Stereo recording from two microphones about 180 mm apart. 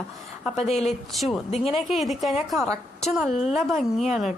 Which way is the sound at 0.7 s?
35° left (ahead or behind).